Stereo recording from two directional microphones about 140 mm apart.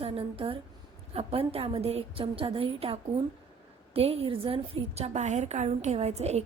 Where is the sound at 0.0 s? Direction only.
45° right (ahead or behind).